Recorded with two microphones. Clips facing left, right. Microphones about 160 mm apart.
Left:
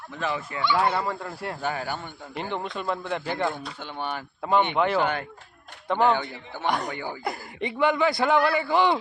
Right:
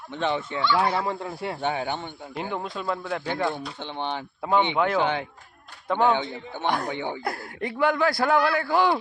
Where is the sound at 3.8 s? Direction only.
20° right (ahead or behind).